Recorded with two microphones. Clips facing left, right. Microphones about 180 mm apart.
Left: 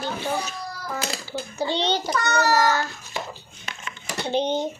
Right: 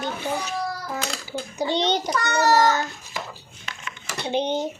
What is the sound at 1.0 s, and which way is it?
Speech, 5° left (ahead or behind).